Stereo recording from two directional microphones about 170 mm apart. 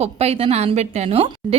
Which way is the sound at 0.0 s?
35° right (ahead or behind).